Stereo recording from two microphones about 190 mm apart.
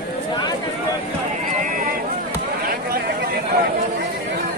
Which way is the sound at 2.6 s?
50° right (ahead or behind).